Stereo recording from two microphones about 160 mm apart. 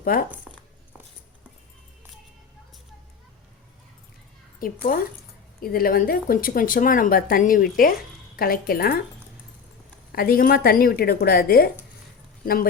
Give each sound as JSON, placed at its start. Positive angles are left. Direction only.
{"t": 0.0, "sound": "speech", "side_deg": 60}
{"t": 4.6, "sound": "a woman's voice", "side_deg": 60}
{"t": 10.1, "sound": "a woman's voice", "side_deg": 65}